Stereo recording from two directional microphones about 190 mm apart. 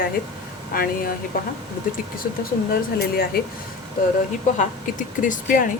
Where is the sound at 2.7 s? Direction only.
50° left (ahead or behind).